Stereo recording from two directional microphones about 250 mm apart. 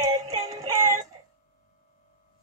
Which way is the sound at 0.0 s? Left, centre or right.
Centre.